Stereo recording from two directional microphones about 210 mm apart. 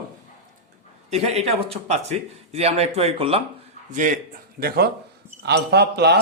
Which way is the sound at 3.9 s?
35° right (ahead or behind).